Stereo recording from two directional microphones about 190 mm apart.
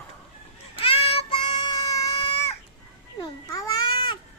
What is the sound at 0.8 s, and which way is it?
Child singing, 30° left (ahead or behind).